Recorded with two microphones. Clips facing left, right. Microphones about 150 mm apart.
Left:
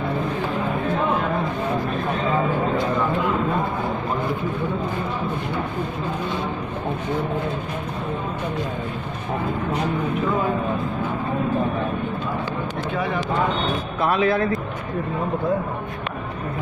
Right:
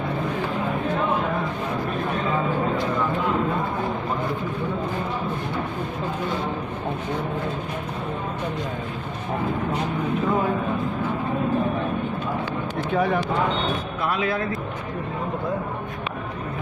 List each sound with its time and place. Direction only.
14.0 s speech: 40° left (ahead or behind)